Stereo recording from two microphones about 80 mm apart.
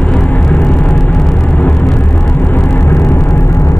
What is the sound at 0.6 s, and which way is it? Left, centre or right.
Vehicle, centre.